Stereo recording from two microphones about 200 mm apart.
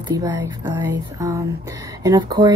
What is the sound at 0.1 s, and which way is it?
A woman's voice, 15° right (ahead or behind).